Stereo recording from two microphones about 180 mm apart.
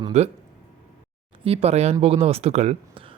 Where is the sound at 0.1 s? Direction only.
40° right (ahead or behind).